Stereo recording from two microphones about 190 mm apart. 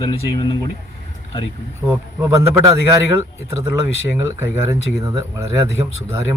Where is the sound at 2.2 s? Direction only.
20° right (ahead or behind).